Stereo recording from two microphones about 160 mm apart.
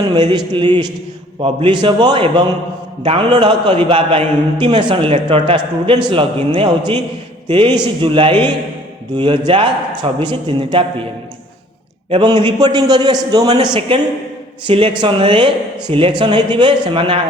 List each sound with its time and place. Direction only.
0.1 s a man's voice: 30° right (ahead or behind)
12.1 s a man's voice: 30° right (ahead or behind)